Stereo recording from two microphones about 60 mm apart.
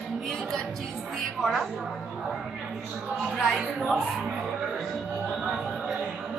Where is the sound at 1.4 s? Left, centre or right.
Centre.